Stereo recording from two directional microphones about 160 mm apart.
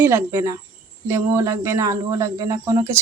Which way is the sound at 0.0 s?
15° right (ahead or behind).